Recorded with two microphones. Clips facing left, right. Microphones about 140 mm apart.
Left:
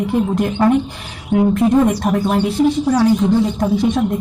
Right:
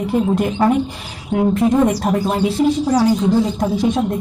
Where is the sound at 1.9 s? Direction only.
35° right (ahead or behind).